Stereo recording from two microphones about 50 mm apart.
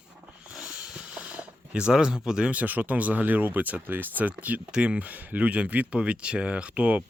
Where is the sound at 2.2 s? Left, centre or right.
Centre.